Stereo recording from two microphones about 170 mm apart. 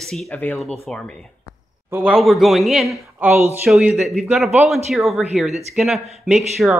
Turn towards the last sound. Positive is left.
turn(degrees=-5)  # may be behind; listen again after turning